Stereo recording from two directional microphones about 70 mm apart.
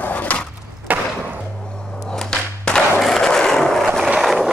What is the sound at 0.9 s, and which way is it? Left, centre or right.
Thump, right.